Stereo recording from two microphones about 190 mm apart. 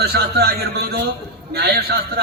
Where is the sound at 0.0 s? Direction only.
55° right (ahead or behind).